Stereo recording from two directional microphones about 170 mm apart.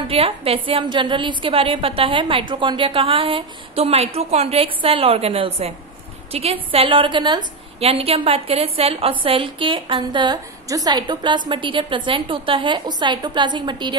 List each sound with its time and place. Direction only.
0.1 s a woman's voice: 35° right (ahead or behind)